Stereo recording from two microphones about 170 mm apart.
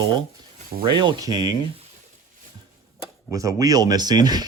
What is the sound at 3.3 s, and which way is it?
Speech, 20° right (ahead or behind).